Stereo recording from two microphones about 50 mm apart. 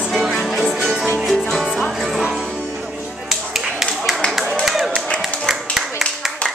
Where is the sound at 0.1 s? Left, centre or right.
Centre.